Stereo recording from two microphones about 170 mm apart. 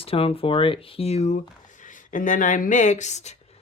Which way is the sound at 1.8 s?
50° left (ahead or behind).